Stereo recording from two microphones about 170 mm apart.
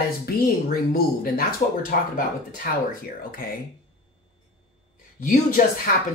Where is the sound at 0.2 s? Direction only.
60° left (ahead or behind).